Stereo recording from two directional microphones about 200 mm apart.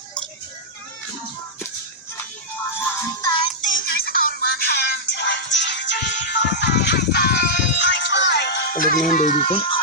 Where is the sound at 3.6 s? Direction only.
45° left (ahead or behind).